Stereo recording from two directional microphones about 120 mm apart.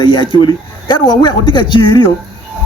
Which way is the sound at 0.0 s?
45° left (ahead or behind).